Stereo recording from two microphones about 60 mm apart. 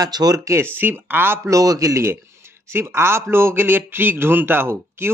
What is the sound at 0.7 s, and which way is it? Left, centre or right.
Speech, right.